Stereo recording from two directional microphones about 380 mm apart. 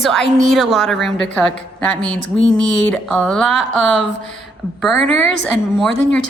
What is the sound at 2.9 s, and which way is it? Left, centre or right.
Speech, centre.